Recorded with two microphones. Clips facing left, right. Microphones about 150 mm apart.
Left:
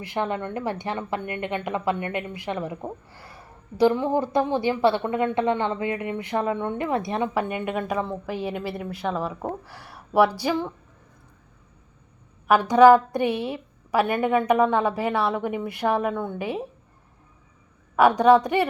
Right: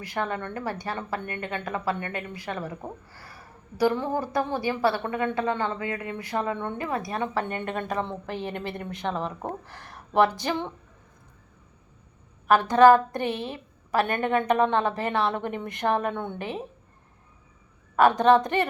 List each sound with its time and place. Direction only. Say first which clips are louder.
0.1 s a woman's voice: left 3 dB; 20° left (ahead or behind)
12.5 s a woman's voice: left 2 dB; 10° left (ahead or behind)
17.9 s a woman's voice: left 2 dB; 10° left (ahead or behind)